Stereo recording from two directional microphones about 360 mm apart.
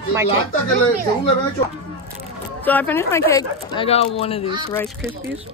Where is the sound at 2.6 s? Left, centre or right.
Centre.